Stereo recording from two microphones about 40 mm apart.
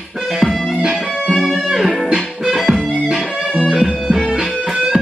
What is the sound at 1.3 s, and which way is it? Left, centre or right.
Music, centre.